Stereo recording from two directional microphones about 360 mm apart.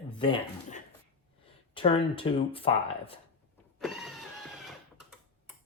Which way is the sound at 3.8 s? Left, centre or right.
Centre.